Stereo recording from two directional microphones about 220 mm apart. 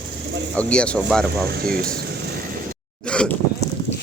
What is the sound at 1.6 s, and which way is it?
Speech, 40° right (ahead or behind).